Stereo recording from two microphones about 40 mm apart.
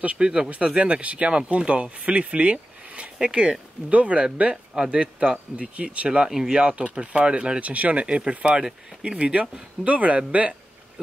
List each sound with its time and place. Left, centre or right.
0.0 s speech: right
3.9 s speech: right
6.3 s speech: centre
6.6 s speech: right
7.6 s speech: right